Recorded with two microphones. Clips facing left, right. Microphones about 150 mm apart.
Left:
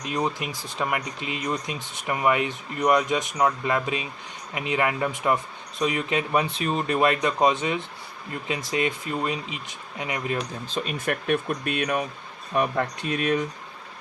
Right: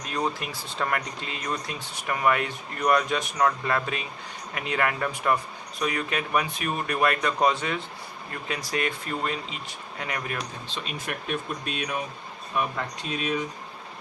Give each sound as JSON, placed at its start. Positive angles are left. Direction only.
{"t": 0.0, "sound": "speech", "side_deg": 20}
{"t": 10.7, "sound": "speech", "side_deg": 45}